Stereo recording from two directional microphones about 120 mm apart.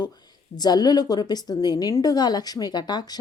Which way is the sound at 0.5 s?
35° left (ahead or behind).